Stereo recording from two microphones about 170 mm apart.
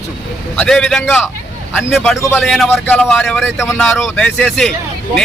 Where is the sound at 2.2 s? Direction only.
15° left (ahead or behind).